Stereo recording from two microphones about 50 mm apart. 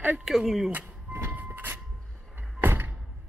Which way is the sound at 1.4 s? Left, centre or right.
Right.